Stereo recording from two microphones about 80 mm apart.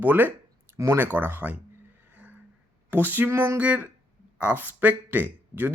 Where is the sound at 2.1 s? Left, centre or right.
Centre.